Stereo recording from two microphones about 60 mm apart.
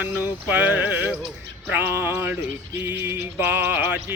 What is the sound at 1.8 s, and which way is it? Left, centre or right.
Music, right.